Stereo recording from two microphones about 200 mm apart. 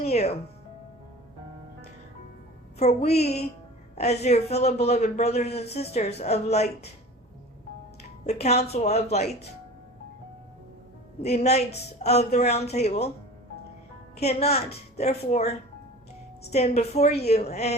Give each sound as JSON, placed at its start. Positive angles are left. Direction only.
{"t": 0.0, "sound": "a man's voice", "side_deg": 30}
{"t": 2.7, "sound": "a man's voice", "side_deg": 35}
{"t": 8.3, "sound": "a man's voice", "side_deg": 30}
{"t": 11.2, "sound": "a man's voice", "side_deg": 30}
{"t": 14.2, "sound": "a man's voice", "side_deg": 30}